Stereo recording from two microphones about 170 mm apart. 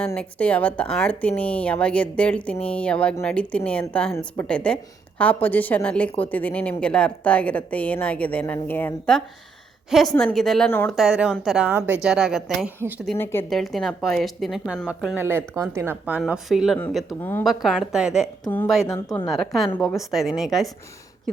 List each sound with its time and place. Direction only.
0.2 s speech: 10° left (ahead or behind)
10.9 s speech: 5° right (ahead or behind)
13.1 s speech: 15° left (ahead or behind)
13.5 s a woman's voice: centre (ahead or behind)
17.2 s speech: 10° left (ahead or behind)
17.4 s speech: centre (ahead or behind)
18.9 s speech: 15° left (ahead or behind)
19.3 s speech: centre (ahead or behind)